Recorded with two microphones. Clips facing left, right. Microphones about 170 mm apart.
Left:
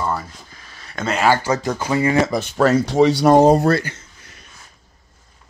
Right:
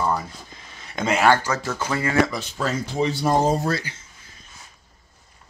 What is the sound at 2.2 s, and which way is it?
Speech, 55° left (ahead or behind).